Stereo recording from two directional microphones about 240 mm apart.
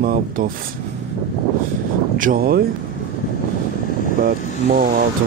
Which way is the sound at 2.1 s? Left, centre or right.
Right.